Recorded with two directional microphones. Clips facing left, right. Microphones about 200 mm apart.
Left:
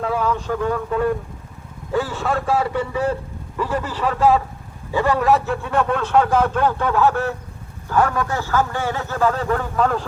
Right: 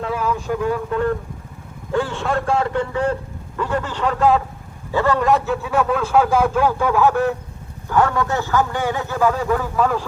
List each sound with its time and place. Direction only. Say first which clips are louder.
0.0 s speech: left 1 dB; 5° right (ahead or behind)
0.9 s a man's voice: even; 5° left (ahead or behind)
4.9 s a man's voice: right 1 dB; 15° left (ahead or behind)
5.2 s speech: even; centre (ahead or behind)